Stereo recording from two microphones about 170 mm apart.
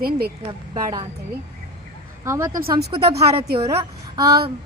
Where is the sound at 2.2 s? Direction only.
15° right (ahead or behind).